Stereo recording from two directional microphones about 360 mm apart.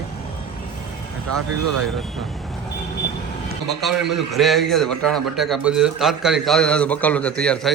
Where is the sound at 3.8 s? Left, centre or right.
Centre.